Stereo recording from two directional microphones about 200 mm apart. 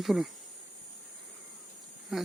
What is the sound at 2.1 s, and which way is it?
Speech, centre (ahead or behind).